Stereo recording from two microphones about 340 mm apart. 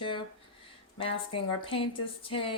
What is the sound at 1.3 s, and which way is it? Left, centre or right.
Speech, centre.